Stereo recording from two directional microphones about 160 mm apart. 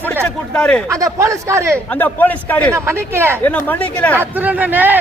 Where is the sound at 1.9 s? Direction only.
10° left (ahead or behind).